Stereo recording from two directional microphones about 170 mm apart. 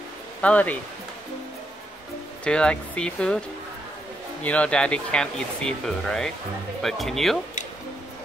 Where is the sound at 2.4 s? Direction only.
5° left (ahead or behind).